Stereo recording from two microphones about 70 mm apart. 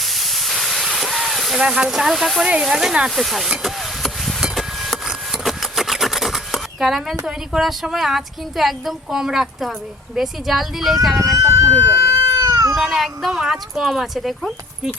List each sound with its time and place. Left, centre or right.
0.0 s hiss: centre
1.6 s speech: centre
2.5 s speech: centre
3.2 s a sound: centre
7.3 s a woman's voice: centre
11.3 s a sound: right
12.5 s cat: right
12.9 s a woman's voice: centre